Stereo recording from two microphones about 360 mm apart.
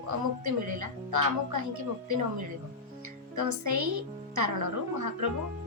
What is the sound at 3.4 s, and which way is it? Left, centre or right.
A woman's voice, right.